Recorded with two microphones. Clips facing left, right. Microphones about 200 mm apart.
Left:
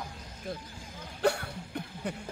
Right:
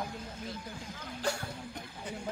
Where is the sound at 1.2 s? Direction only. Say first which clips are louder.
Left 7 dB; 60° left (ahead or behind).